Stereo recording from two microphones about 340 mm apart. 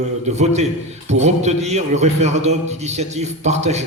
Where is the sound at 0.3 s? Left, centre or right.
Centre.